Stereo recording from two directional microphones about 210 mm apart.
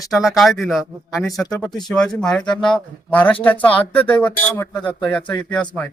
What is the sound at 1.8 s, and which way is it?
Speech, centre (ahead or behind).